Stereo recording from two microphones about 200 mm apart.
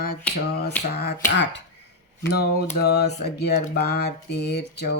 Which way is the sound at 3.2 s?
55° left (ahead or behind).